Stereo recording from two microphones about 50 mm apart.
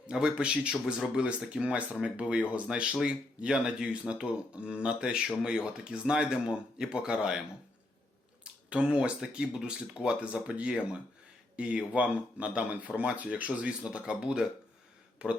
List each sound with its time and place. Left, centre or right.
0.1 s a man's voice: centre
8.7 s a man's voice: centre